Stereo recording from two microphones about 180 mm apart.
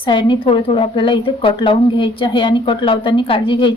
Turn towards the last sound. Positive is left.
turn(degrees=25)  # may be behind; listen again after turning